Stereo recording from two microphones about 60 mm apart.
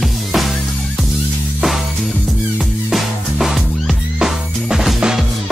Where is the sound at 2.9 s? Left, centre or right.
Centre.